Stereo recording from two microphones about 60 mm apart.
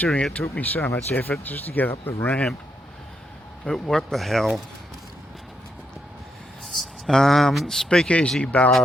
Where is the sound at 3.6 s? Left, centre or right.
Centre.